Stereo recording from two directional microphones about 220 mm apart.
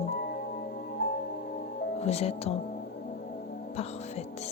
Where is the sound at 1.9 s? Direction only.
30° left (ahead or behind).